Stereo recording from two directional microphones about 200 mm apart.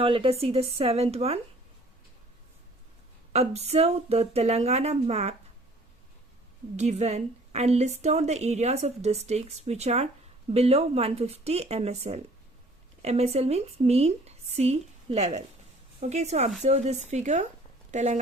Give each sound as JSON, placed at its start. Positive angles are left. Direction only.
{"t": 0.0, "sound": "speech", "side_deg": -25}
{"t": 3.3, "sound": "a woman's voice", "side_deg": -30}
{"t": 6.7, "sound": "a woman's voice", "side_deg": -35}